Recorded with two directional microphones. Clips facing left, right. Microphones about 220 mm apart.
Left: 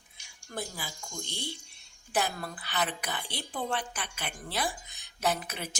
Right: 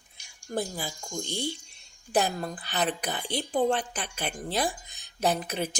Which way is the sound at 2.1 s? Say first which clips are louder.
Right 5 dB; 35° right (ahead or behind).